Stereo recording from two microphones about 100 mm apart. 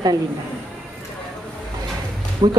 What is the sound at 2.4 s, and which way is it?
Speech, 50° right (ahead or behind).